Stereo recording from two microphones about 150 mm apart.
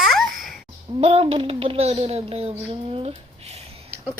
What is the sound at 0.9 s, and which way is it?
Speech, 35° right (ahead or behind).